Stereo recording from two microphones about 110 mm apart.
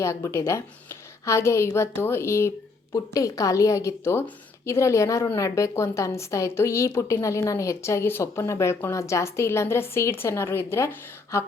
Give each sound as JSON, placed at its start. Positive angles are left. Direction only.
{"t": 0.0, "sound": "a woman's voice", "side_deg": 25}